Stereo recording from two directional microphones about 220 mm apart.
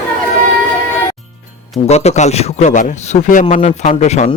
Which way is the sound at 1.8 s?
30° left (ahead or behind).